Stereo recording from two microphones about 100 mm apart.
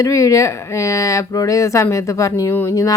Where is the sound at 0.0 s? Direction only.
30° left (ahead or behind).